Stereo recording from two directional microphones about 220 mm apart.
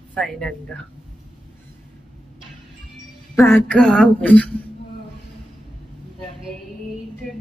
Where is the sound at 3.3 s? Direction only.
10° left (ahead or behind).